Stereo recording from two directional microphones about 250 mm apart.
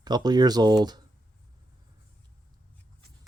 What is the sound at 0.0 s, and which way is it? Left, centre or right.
Speech, centre.